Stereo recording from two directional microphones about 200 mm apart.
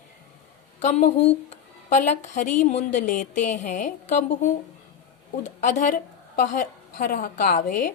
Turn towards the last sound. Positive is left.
turn(degrees=40)  # may be behind; listen again after turning